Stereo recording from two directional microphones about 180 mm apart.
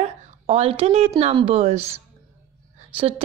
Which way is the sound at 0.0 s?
35° right (ahead or behind).